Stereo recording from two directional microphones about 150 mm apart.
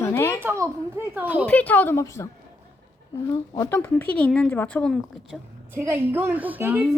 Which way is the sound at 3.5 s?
15° left (ahead or behind).